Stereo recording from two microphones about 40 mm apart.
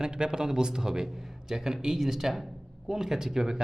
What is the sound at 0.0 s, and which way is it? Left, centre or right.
A man's voice, centre.